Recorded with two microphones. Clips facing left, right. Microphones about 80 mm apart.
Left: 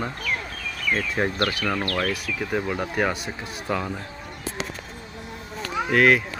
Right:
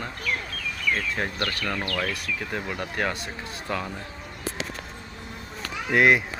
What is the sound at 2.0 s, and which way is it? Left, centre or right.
Speech, centre.